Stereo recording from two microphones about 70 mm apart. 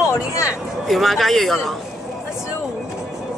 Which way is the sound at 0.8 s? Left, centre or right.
Centre.